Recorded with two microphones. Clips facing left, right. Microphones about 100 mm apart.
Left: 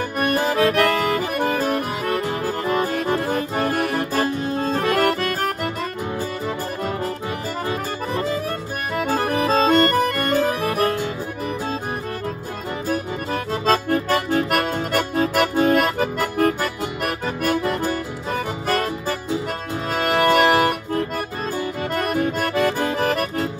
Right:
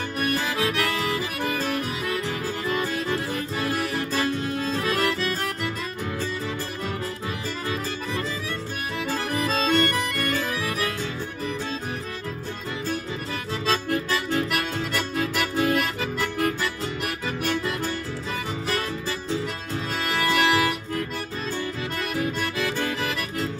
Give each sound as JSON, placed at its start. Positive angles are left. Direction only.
{"t": 0.2, "sound": "music", "side_deg": 35}
{"t": 7.6, "sound": "music", "side_deg": 35}
{"t": 8.9, "sound": "accordion", "side_deg": 45}
{"t": 9.5, "sound": "music", "side_deg": 35}
{"t": 12.8, "sound": "accordion", "side_deg": 45}
{"t": 18.3, "sound": "music", "side_deg": 45}
{"t": 19.9, "sound": "accordion", "side_deg": 40}